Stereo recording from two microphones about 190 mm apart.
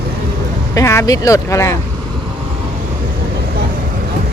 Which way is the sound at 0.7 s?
15° left (ahead or behind).